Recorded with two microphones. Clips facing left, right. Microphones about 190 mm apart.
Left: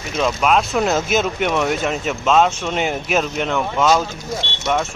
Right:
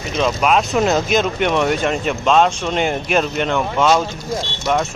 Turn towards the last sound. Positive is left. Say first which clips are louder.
# right 2 dB
turn(degrees=0)  # may be behind; listen again after turning